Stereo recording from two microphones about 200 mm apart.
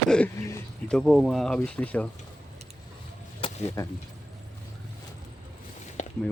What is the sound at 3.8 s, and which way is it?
Speech, 15° left (ahead or behind).